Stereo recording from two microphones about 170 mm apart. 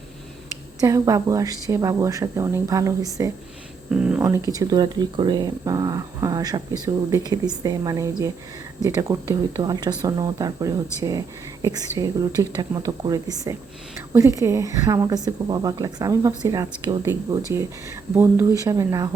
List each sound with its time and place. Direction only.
0.8 s speech: 20° right (ahead or behind)
3.9 s speech: 5° right (ahead or behind)
4.2 s speech: 15° right (ahead or behind)